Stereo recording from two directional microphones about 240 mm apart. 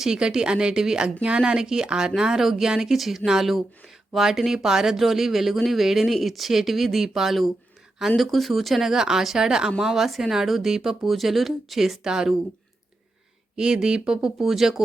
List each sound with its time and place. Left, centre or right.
0.0 s speech: centre
13.6 s speech: centre